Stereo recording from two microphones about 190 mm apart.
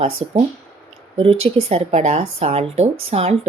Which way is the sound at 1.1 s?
30° right (ahead or behind).